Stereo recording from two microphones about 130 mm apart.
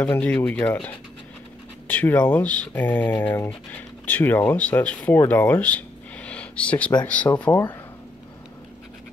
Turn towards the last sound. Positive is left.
turn(degrees=20)  # may be behind; listen again after turning